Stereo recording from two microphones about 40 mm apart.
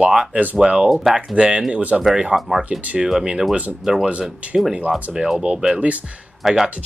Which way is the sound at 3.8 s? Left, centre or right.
Centre.